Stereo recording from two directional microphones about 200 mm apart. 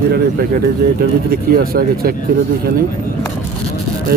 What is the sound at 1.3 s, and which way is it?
Speech, 50° right (ahead or behind).